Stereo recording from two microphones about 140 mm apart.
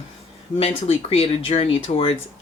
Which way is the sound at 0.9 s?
45° left (ahead or behind).